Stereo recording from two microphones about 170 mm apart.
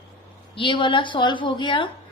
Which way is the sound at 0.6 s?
30° left (ahead or behind).